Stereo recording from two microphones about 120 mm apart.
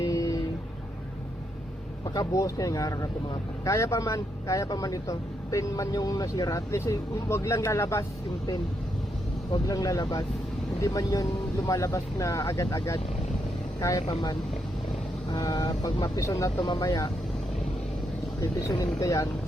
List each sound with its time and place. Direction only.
0.1 s vehicle: 30° left (ahead or behind)
2.0 s a man's voice: 30° left (ahead or behind)
9.5 s a man's voice: 30° left (ahead or behind)
15.3 s speech: 35° left (ahead or behind)
18.7 s a man's voice: 30° left (ahead or behind)